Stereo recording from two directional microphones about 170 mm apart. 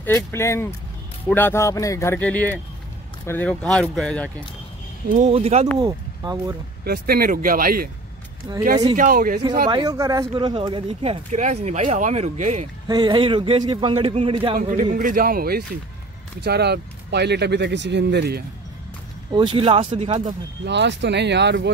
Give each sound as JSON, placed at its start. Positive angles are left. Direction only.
{"t": 0.0, "sound": "speech", "side_deg": 15}
{"t": 5.1, "sound": "a man's voice", "side_deg": -40}
{"t": 5.8, "sound": "speech", "side_deg": -20}
{"t": 6.8, "sound": "speech", "side_deg": -65}
{"t": 8.9, "sound": "speech", "side_deg": -55}
{"t": 9.7, "sound": "speech", "side_deg": -25}
{"t": 11.3, "sound": "speech", "side_deg": -45}
{"t": 12.8, "sound": "a man's voice", "side_deg": -25}
{"t": 14.6, "sound": "speech", "side_deg": -50}
{"t": 19.3, "sound": "a man's voice", "side_deg": -30}
{"t": 20.6, "sound": "speech", "side_deg": -90}